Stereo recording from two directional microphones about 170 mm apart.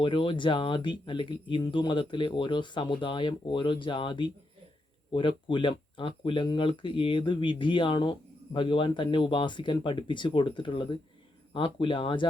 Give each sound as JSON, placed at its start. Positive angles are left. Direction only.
{"t": 0.0, "sound": "speech", "side_deg": 30}